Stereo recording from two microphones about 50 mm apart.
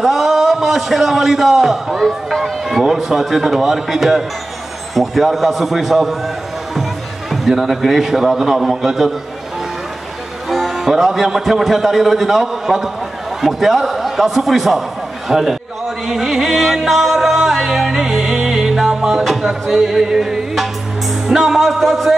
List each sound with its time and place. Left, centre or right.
0.0 s a man's voice: centre
10.5 s a man's voice: centre
16.1 s music: centre
21.3 s a man's voice: centre